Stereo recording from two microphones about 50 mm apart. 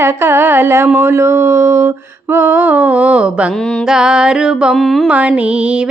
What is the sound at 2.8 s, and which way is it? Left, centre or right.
Music, right.